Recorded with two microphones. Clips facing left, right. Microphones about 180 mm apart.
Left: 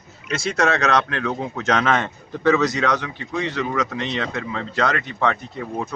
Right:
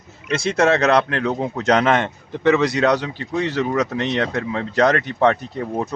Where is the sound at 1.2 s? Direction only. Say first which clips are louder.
Right 3 dB; 25° right (ahead or behind).